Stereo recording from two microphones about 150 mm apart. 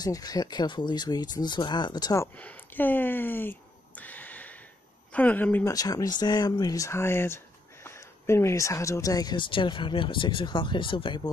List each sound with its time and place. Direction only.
0.0 s speech: 25° left (ahead or behind)
2.3 s a sound: 10° left (ahead or behind)
5.1 s speech: 10° left (ahead or behind)
5.7 s speech: 25° left (ahead or behind)